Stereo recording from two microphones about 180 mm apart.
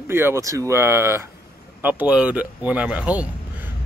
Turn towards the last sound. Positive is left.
turn(degrees=-5)  # may be behind; listen again after turning